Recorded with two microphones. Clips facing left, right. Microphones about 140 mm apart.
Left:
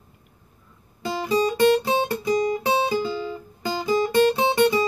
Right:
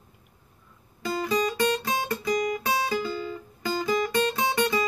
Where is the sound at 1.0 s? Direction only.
30° left (ahead or behind).